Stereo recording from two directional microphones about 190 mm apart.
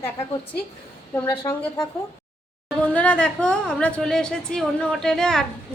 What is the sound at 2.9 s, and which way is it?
A woman's voice, 5° left (ahead or behind).